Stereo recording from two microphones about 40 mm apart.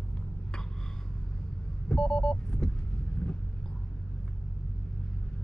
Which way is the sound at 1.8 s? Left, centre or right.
Centre.